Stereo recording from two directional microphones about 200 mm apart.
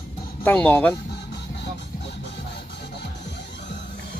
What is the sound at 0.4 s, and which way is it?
Speech, 10° left (ahead or behind).